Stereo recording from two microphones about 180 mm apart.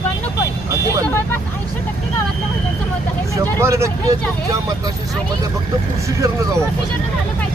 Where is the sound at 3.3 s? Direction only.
15° right (ahead or behind).